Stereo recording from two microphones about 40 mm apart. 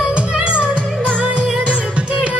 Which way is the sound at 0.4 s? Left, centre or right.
Right.